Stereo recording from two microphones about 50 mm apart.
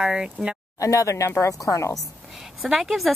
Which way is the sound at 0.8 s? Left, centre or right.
Left.